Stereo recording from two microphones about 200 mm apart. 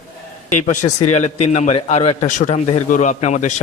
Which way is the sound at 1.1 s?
35° left (ahead or behind).